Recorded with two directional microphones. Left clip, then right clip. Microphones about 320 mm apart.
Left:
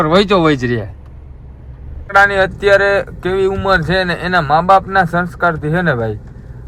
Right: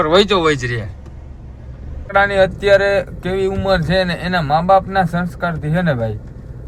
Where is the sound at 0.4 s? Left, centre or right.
Centre.